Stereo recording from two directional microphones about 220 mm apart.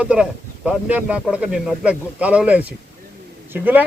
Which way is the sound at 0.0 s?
5° right (ahead or behind).